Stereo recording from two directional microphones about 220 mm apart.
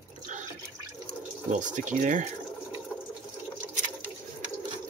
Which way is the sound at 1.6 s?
35° right (ahead or behind).